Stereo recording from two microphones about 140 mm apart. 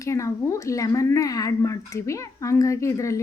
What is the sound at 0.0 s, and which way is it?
Speech, 20° left (ahead or behind).